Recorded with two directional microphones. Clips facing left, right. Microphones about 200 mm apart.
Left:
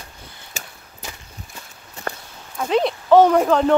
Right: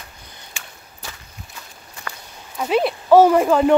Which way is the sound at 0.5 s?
40° left (ahead or behind).